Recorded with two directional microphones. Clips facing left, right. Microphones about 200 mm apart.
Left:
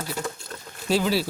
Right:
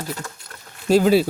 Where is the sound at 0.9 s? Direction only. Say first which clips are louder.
Right 8 dB; 50° right (ahead or behind).